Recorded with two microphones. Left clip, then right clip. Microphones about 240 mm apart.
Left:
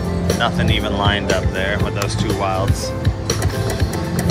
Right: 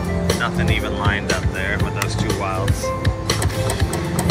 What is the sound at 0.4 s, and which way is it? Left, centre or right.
Speech, centre.